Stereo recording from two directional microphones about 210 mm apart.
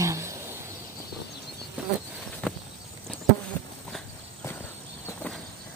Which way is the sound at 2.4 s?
5° left (ahead or behind).